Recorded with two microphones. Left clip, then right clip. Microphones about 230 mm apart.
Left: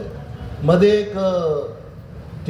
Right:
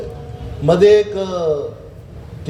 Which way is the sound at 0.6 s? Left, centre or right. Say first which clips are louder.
Right 4 dB; right.